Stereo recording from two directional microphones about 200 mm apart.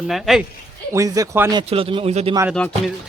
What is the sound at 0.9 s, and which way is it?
Speech, 15° right (ahead or behind).